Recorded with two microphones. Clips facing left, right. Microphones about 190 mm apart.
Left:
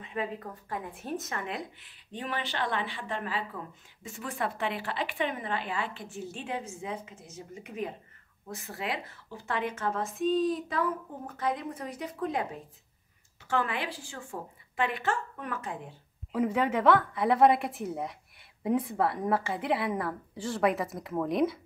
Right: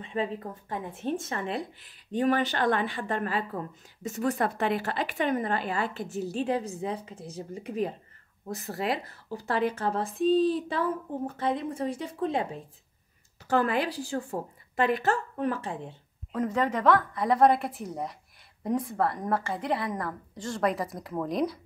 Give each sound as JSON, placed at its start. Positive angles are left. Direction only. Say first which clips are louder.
{"t": 0.0, "sound": "speech", "louder": "right 4 dB", "side_deg": -30}
{"t": 13.5, "sound": "speech", "louder": "right 5 dB", "side_deg": -40}
{"t": 16.3, "sound": "a woman's voice", "louder": "even", "side_deg": 10}